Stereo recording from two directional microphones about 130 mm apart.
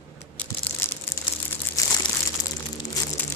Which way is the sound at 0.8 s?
20° left (ahead or behind).